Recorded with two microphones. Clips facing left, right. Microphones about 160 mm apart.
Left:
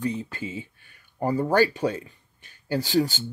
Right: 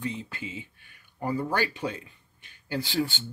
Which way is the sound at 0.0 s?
40° left (ahead or behind).